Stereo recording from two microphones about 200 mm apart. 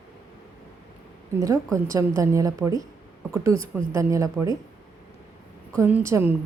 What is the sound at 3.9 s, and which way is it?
Speech, 15° right (ahead or behind).